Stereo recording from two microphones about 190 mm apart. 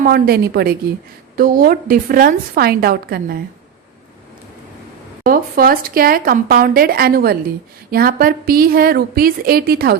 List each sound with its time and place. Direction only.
0.0 s speech: 55° right (ahead or behind)
5.2 s speech: 50° right (ahead or behind)